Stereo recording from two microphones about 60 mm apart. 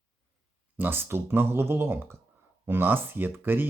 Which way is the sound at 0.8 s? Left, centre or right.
Right.